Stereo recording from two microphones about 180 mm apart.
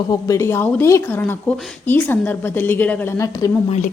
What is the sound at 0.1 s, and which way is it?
A woman's voice, 15° left (ahead or behind).